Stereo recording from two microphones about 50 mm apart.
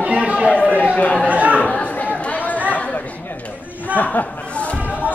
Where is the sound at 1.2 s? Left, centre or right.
Right.